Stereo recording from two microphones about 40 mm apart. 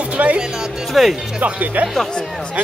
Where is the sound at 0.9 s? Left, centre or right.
Centre.